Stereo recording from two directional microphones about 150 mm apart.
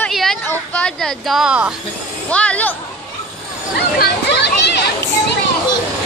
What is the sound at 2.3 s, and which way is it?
Speech, 10° left (ahead or behind).